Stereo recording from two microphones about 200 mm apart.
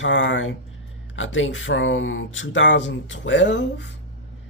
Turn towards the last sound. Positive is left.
turn(degrees=65)  # may be behind; listen again after turning